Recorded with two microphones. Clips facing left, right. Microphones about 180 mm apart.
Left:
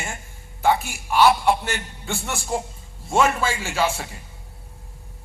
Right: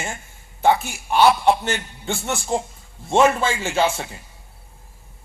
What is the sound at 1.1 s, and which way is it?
Speech, 25° right (ahead or behind).